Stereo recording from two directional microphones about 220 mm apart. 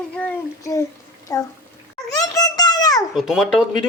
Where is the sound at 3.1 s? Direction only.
Centre (ahead or behind).